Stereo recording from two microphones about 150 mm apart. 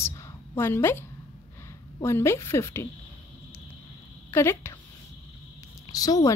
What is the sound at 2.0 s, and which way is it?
Speech, 15° left (ahead or behind).